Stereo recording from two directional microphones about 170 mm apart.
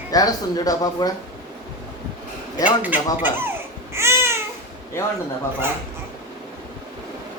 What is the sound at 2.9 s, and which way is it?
Speech, 10° right (ahead or behind).